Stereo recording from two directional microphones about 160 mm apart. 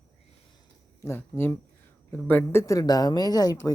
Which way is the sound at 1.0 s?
15° left (ahead or behind).